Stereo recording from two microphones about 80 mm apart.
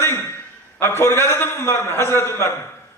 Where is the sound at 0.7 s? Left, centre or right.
Left.